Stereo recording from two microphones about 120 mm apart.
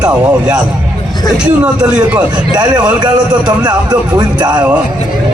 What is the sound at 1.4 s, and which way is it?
Speech, 10° right (ahead or behind).